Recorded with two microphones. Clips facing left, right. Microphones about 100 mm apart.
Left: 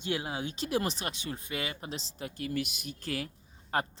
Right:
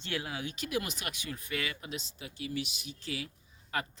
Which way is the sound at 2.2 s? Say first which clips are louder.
Left 5 dB; 50° left (ahead or behind).